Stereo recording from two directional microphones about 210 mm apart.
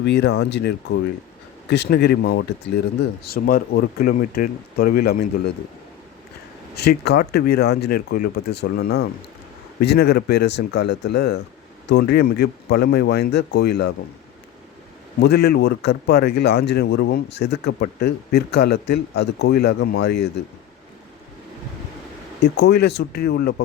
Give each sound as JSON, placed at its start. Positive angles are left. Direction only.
{"t": 0.0, "sound": "speech", "side_deg": 55}
{"t": 6.7, "sound": "speech", "side_deg": 50}
{"t": 15.2, "sound": "speech", "side_deg": 50}
{"t": 22.5, "sound": "speech", "side_deg": 50}